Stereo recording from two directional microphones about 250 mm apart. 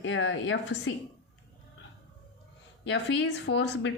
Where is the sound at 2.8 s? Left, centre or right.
Left.